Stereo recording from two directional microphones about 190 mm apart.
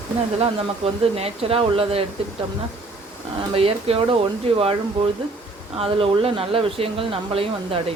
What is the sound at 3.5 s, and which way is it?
Speech, 30° right (ahead or behind).